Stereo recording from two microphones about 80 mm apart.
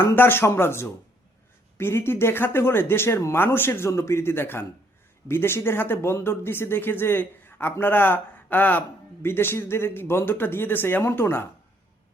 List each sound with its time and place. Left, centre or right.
0.2 s speech: left